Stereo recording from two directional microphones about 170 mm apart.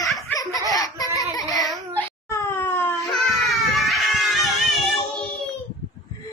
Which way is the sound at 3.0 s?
Centre (ahead or behind).